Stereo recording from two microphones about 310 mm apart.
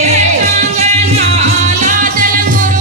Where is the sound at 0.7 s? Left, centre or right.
Right.